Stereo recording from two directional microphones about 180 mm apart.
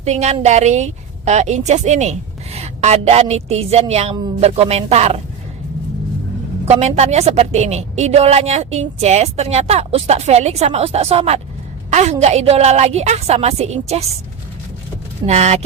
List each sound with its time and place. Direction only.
0.0 s a woman's voice: 40° right (ahead or behind)
6.7 s a woman's voice: 35° right (ahead or behind)
15.3 s a woman's voice: 40° right (ahead or behind)